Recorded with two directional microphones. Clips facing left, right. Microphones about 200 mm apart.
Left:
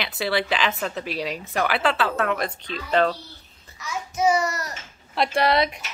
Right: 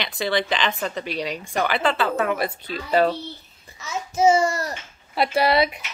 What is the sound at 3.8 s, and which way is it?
A child's voice, 25° right (ahead or behind).